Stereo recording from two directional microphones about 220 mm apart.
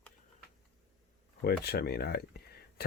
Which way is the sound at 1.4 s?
45° left (ahead or behind).